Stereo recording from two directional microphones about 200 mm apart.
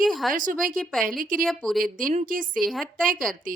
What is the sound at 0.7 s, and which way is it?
Speech, centre (ahead or behind).